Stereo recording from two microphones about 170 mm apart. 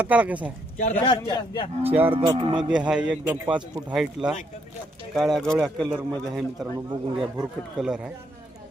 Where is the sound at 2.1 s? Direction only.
30° right (ahead or behind).